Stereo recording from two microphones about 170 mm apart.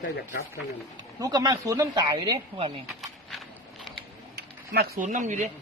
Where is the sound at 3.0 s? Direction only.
Centre (ahead or behind).